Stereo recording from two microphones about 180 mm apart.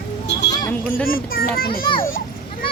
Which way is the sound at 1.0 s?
55° left (ahead or behind).